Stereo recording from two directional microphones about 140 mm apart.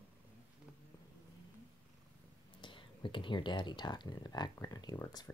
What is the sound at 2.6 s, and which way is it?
Speech, 35° left (ahead or behind).